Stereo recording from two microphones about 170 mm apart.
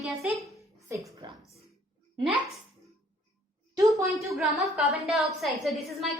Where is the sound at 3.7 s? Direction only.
20° right (ahead or behind).